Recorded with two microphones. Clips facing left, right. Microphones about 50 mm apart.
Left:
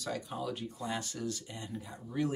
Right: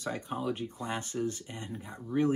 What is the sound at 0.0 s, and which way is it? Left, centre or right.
Speech, right.